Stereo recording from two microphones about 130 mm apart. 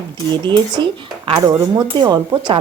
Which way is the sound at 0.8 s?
35° right (ahead or behind).